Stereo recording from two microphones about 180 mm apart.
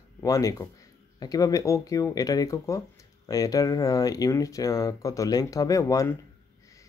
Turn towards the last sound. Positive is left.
turn(degrees=20)  # may be behind; listen again after turning